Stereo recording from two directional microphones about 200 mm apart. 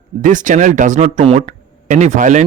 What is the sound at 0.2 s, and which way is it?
A man's voice, 40° right (ahead or behind).